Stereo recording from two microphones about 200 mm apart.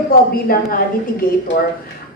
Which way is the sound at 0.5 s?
45° left (ahead or behind).